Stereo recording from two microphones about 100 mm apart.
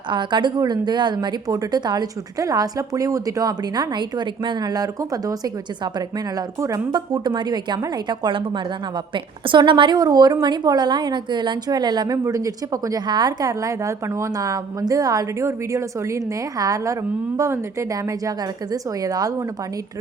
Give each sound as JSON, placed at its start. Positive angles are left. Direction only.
{"t": 0.1, "sound": "a woman's voice", "side_deg": -50}